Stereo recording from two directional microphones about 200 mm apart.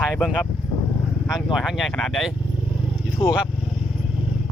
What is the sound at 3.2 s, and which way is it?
Speech, 25° left (ahead or behind).